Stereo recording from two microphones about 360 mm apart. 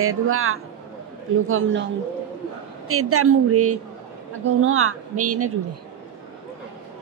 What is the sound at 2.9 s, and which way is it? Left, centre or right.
Speech, right.